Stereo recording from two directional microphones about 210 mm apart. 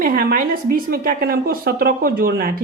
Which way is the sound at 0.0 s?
45° right (ahead or behind).